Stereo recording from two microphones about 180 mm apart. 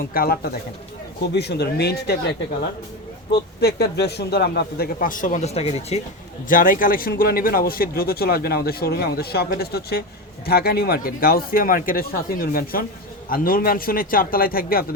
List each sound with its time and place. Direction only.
0.0 s speech: 55° left (ahead or behind)
1.3 s speech: 65° left (ahead or behind)
3.3 s speech: 65° left (ahead or behind); by 6.0 s 35° left (ahead or behind)
6.5 s a man's voice: 50° left (ahead or behind)